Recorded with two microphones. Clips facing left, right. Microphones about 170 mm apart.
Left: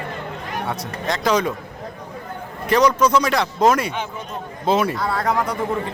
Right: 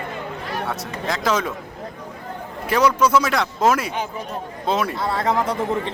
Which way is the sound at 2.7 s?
5° right (ahead or behind).